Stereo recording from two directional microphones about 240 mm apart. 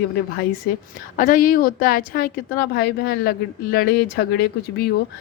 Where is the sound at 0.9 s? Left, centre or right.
Left.